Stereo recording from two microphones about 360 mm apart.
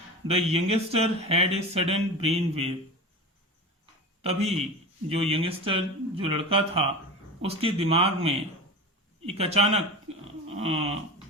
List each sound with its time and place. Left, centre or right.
0.3 s speech: centre
4.2 s a man's voice: centre